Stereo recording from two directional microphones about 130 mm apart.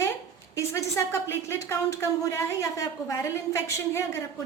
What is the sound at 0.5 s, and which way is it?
Speech, 25° left (ahead or behind).